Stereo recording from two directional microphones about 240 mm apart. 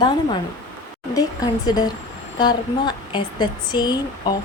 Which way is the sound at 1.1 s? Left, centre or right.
Centre.